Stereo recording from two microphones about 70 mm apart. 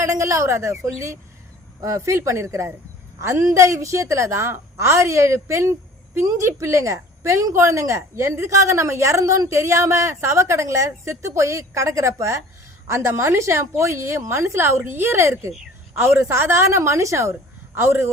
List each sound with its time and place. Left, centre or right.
0.0 s a woman's voice: right